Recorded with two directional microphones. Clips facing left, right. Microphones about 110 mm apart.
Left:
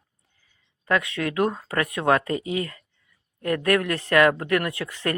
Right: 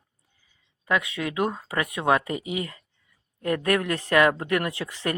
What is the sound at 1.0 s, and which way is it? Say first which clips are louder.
Speech: left 3 dB; 20° right (ahead or behind).